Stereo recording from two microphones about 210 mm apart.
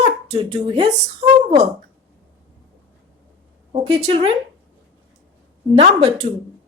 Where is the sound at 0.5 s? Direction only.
25° right (ahead or behind).